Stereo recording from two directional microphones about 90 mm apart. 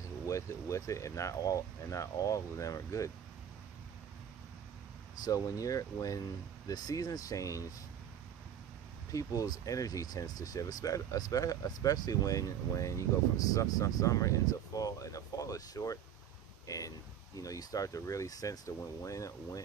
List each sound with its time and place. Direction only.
0.3 s speech: 35° left (ahead or behind)
5.2 s speech: 40° left (ahead or behind)
9.1 s speech: 40° left (ahead or behind)